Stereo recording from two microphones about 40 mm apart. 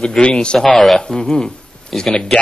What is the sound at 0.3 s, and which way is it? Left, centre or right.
Speech, left.